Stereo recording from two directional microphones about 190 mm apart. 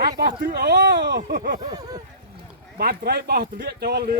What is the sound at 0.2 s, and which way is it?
Speech, 50° right (ahead or behind).